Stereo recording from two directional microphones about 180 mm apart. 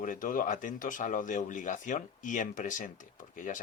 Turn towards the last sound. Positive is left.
turn(degrees=45)  # may be behind; listen again after turning